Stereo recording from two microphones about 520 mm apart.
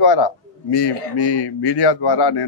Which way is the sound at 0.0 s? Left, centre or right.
Left.